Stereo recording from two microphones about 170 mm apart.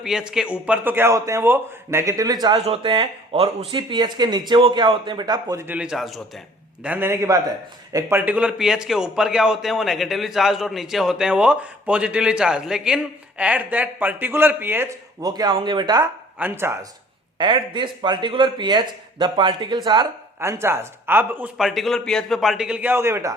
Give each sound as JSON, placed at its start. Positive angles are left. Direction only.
{"t": 0.0, "sound": "a man's voice", "side_deg": -5}
{"t": 6.8, "sound": "a man's voice", "side_deg": -10}
{"t": 15.2, "sound": "a man's voice", "side_deg": -25}
{"t": 16.4, "sound": "speech", "side_deg": -15}
{"t": 17.3, "sound": "speech", "side_deg": -30}